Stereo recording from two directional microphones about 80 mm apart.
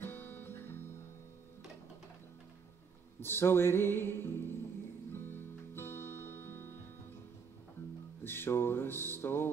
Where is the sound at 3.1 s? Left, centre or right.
Left.